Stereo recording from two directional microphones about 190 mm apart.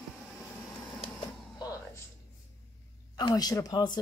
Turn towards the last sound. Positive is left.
turn(degrees=20)  # may be behind; listen again after turning